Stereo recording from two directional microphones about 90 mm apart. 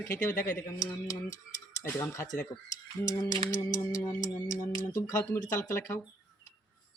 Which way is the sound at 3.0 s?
45° left (ahead or behind).